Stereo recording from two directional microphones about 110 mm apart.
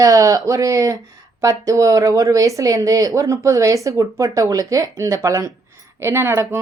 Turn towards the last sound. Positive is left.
turn(degrees=-25)  # may be behind; listen again after turning